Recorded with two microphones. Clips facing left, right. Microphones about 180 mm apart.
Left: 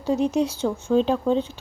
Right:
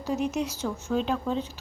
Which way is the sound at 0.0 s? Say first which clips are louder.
Left 6 dB; 30° left (ahead or behind).